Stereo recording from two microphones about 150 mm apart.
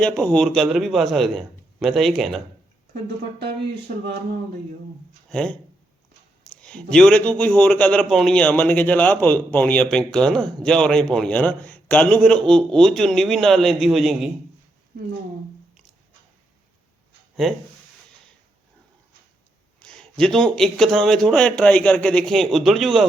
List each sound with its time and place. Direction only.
0.0 s speech: 5° left (ahead or behind)
2.9 s speech: 90° right
5.3 s a man's voice: 5° left (ahead or behind)
6.6 s a man's voice: 5° left (ahead or behind)
14.9 s speech: 80° right
19.8 s speech: 5° left (ahead or behind)